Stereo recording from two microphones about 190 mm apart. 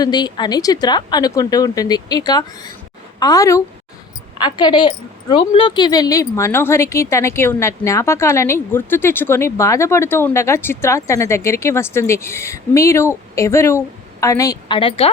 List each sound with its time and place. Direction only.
0.0 s a woman's voice: 25° left (ahead or behind)